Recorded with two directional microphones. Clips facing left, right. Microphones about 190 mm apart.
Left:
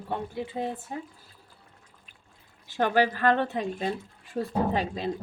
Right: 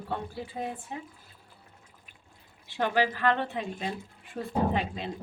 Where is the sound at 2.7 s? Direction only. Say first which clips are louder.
Left 3 dB; 45° left (ahead or behind).